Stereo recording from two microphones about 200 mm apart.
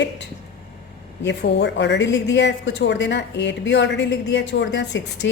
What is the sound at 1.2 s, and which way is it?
A woman's voice, 60° left (ahead or behind).